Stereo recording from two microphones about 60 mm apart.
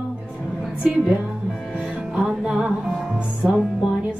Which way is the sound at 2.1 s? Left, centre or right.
Centre.